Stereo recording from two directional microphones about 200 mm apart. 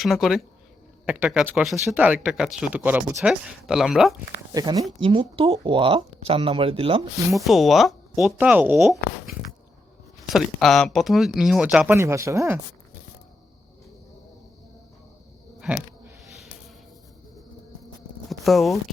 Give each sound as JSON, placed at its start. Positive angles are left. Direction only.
{"t": 0.0, "sound": "speech", "side_deg": 0}
{"t": 4.5, "sound": "speech", "side_deg": -20}
{"t": 7.3, "sound": "speech", "side_deg": 0}
{"t": 18.3, "sound": "speech", "side_deg": 0}